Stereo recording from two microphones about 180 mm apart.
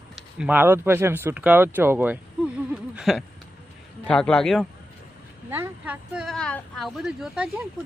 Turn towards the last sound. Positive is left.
turn(degrees=0)  # may be behind; listen again after turning